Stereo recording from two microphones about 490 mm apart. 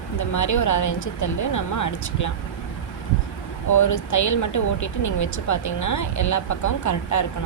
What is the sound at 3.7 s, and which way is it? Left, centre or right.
Speech, left.